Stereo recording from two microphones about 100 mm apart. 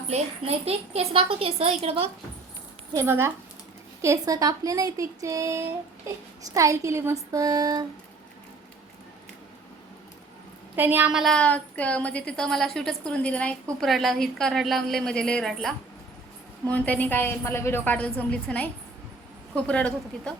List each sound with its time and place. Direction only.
0.1 s a child's voice: 90° right
1.8 s a woman's voice: 70° right (ahead or behind)
2.9 s speech: 25° right (ahead or behind)
10.8 s speech: 20° right (ahead or behind)
11.1 s a woman's voice: 5° right (ahead or behind)
11.3 s a woman's voice: 15° left (ahead or behind)